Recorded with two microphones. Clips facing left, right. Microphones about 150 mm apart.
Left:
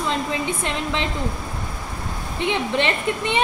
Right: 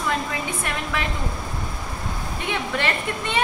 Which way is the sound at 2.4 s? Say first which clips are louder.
Left 4 dB; 20° left (ahead or behind).